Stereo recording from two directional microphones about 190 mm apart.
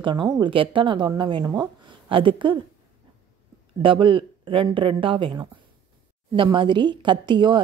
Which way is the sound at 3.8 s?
25° right (ahead or behind).